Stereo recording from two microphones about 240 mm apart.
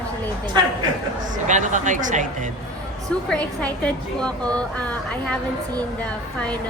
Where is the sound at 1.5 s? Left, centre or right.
Right.